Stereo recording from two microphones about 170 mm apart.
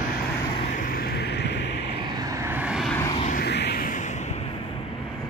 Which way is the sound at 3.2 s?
65° left (ahead or behind).